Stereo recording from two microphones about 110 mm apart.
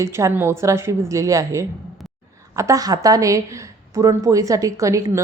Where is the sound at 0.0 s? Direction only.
25° right (ahead or behind).